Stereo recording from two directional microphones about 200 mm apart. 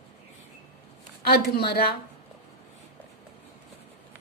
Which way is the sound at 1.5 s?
50° left (ahead or behind).